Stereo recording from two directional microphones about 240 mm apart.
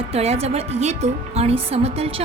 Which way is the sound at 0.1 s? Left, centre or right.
Right.